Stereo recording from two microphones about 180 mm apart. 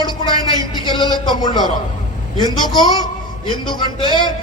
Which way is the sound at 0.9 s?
25° left (ahead or behind).